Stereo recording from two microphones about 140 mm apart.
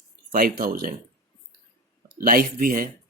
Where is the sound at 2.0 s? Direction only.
90° right.